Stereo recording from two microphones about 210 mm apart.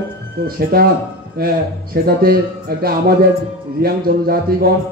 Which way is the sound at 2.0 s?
45° right (ahead or behind).